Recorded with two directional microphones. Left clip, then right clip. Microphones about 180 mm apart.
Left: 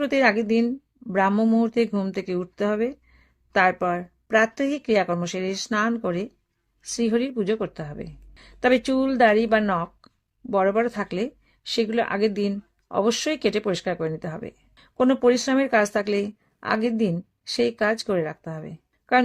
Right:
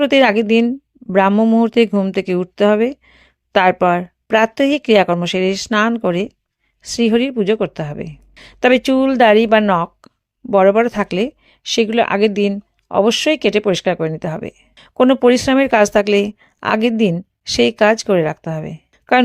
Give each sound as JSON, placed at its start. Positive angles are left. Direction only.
{"t": 0.0, "sound": "speech", "side_deg": -30}